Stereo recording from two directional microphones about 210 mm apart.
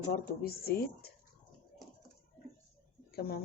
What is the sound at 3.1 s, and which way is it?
Speech, 50° left (ahead or behind).